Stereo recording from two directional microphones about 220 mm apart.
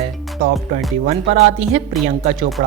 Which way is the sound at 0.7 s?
35° right (ahead or behind).